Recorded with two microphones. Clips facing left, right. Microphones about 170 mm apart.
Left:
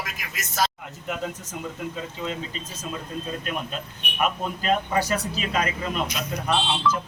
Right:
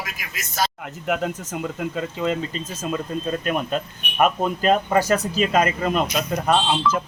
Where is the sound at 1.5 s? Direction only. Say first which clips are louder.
Right 5 dB; 65° right (ahead or behind).